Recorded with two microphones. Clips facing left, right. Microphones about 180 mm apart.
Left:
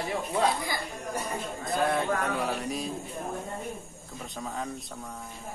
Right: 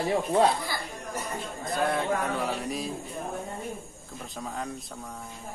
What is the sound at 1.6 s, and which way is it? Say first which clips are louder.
Speech: even; centre (ahead or behind).